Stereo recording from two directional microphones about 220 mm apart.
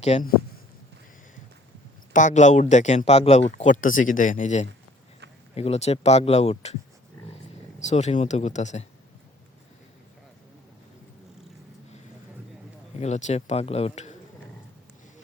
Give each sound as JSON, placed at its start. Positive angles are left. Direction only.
{"t": 0.0, "sound": "speech", "side_deg": 30}
{"t": 2.1, "sound": "speech", "side_deg": 35}
{"t": 7.8, "sound": "speech", "side_deg": 30}
{"t": 13.0, "sound": "speech", "side_deg": 30}